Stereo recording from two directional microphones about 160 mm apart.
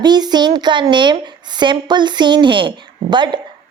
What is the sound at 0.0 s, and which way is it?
A woman's voice, 25° right (ahead or behind).